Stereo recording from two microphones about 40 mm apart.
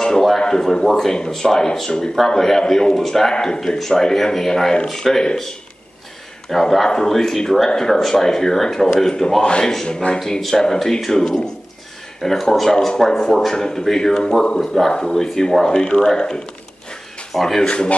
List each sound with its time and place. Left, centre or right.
0.4 s speech: centre
6.5 s speech: centre
9.4 s speech: left
10.1 s speech: centre
17.3 s speech: centre
17.6 s speech: left